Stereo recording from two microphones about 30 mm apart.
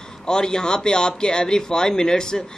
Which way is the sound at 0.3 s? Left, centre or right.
Left.